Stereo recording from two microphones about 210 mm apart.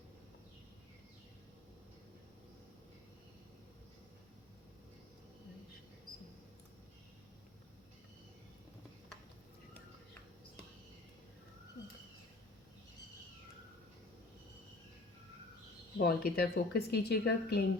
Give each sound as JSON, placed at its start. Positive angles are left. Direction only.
{"t": 16.0, "sound": "a woman's voice", "side_deg": 45}